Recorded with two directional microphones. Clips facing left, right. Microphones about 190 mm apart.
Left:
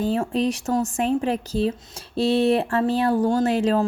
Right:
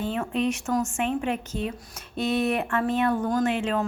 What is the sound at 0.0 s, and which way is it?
Speech, 35° left (ahead or behind).